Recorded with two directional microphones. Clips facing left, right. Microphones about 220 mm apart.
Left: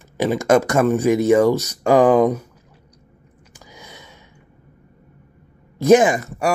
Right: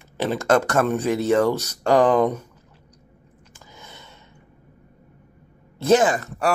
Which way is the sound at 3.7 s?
10° left (ahead or behind).